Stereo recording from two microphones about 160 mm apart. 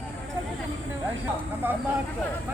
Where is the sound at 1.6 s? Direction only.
10° right (ahead or behind).